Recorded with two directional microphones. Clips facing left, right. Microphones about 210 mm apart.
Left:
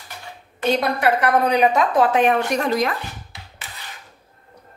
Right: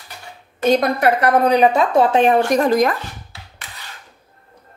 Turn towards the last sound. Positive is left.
turn(degrees=-40)  # may be behind; listen again after turning